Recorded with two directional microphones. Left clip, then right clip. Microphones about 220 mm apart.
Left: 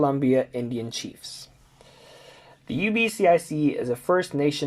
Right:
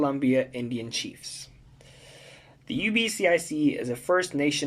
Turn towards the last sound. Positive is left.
turn(degrees=10)  # may be behind; listen again after turning